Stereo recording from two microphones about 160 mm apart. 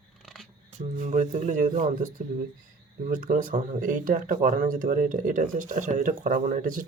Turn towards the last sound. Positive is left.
turn(degrees=-55)  # may be behind; listen again after turning